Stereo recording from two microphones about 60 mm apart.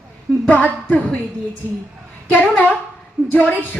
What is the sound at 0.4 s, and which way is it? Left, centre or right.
Speech, left.